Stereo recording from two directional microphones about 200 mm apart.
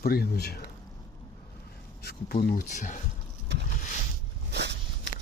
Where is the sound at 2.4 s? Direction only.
40° left (ahead or behind).